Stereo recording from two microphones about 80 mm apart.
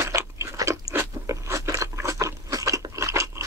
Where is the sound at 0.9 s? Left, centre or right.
Right.